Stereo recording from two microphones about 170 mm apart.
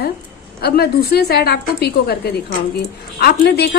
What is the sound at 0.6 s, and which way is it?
A woman's voice, 70° left (ahead or behind).